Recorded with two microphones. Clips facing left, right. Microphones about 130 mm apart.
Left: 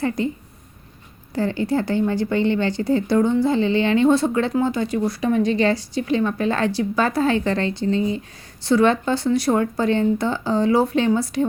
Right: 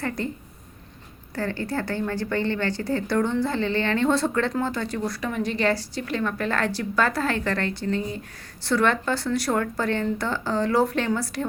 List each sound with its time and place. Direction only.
0.2 s speech: 15° left (ahead or behind)
1.4 s a woman's voice: 15° left (ahead or behind)